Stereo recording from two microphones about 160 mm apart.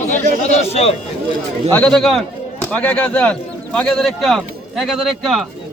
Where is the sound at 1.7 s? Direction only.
5° left (ahead or behind).